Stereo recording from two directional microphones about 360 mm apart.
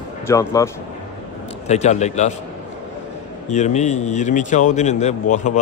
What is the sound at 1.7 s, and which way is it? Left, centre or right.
Speech, centre.